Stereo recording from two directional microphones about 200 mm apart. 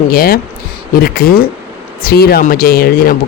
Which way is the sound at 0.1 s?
45° left (ahead or behind).